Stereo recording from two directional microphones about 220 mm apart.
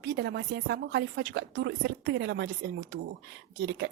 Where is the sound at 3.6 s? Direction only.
50° right (ahead or behind).